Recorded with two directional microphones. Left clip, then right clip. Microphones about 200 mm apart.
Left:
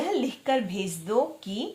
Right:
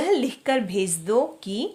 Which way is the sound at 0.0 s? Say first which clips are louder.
Right 5 dB; 40° right (ahead or behind).